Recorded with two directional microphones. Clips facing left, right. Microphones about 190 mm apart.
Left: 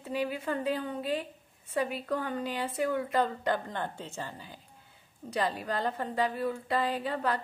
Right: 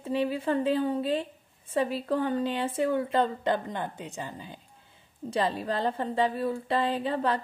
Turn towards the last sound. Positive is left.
turn(degrees=-25)  # may be behind; listen again after turning